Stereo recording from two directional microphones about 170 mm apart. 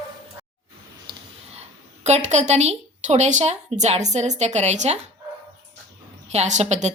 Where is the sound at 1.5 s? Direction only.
40° right (ahead or behind).